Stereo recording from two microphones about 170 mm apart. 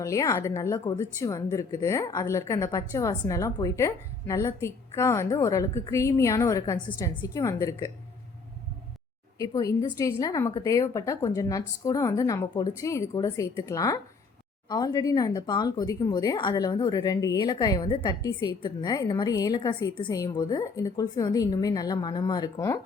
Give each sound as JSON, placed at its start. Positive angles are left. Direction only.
{"t": 0.0, "sound": "a woman's voice", "side_deg": 20}
{"t": 9.4, "sound": "speech", "side_deg": 20}